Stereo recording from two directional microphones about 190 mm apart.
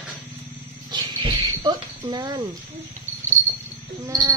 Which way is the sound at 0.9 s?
25° right (ahead or behind).